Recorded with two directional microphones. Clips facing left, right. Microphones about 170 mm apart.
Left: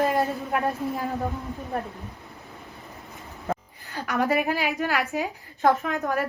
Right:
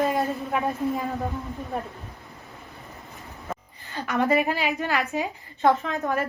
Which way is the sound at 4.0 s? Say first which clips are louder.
Right 2 dB; 5° left (ahead or behind).